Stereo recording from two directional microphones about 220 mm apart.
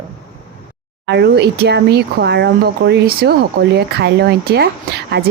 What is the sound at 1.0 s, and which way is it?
Speech, 50° right (ahead or behind).